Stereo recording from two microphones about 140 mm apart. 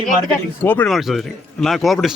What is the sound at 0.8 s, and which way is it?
Speech, centre (ahead or behind).